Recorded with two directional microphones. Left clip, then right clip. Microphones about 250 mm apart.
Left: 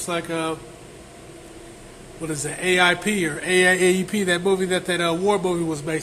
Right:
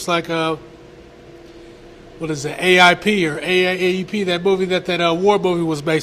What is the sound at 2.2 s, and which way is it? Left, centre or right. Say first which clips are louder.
Speech: right 6 dB; centre.